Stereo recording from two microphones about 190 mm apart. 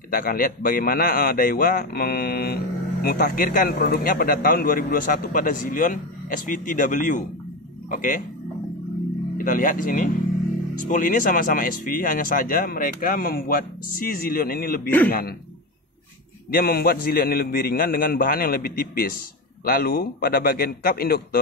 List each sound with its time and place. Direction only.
0.1 s a man's voice: 50° left (ahead or behind)
9.4 s a man's voice: 45° left (ahead or behind)
16.4 s a man's voice: 50° left (ahead or behind)